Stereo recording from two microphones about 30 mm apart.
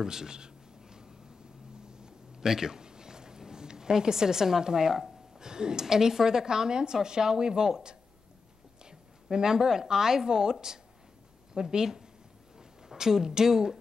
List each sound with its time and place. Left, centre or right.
0.0 s writing: right
1.9 s a sound: right
5.4 s a woman's voice: right
9.3 s a woman's voice: centre